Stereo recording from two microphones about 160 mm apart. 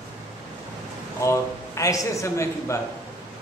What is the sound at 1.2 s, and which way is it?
A man's voice, 20° left (ahead or behind).